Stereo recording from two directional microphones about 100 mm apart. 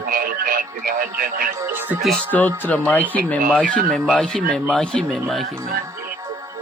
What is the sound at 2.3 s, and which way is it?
Speech, 15° left (ahead or behind).